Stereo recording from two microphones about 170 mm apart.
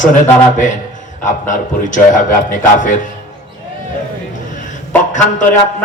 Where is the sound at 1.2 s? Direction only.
50° left (ahead or behind).